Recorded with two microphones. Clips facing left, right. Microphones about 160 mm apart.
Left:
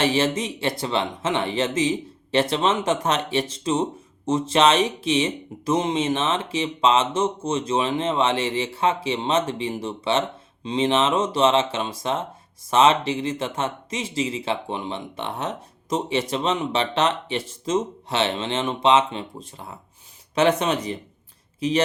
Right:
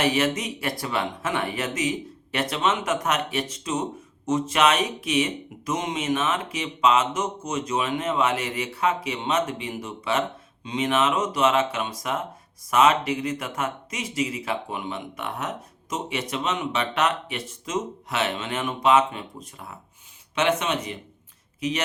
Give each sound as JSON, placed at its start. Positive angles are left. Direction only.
{"t": 0.0, "sound": "speech", "side_deg": 30}